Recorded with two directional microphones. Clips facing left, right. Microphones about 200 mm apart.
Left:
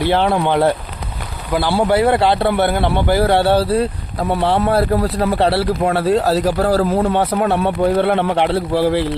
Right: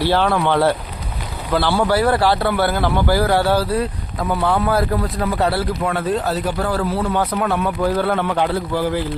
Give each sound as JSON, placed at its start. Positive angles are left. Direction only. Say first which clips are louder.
{"t": 0.0, "sound": "a man's voice", "louder": "left 2 dB", "side_deg": 20}